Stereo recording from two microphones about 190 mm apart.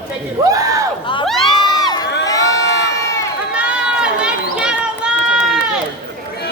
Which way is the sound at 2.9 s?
15° left (ahead or behind).